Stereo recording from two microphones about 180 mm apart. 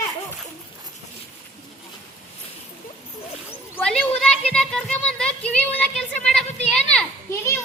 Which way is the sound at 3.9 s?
5° left (ahead or behind).